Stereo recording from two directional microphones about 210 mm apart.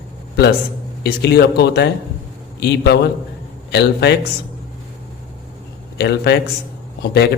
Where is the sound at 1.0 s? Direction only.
50° left (ahead or behind).